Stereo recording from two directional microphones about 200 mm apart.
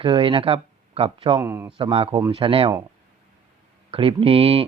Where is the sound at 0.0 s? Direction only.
25° right (ahead or behind).